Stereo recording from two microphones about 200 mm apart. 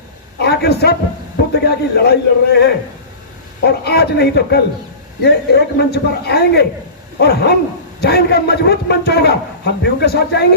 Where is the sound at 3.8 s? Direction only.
55° left (ahead or behind).